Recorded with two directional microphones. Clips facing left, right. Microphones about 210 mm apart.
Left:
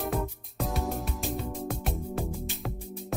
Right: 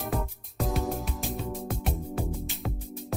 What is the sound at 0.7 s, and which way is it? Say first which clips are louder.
Music: right 2 dB; centre (ahead or behind).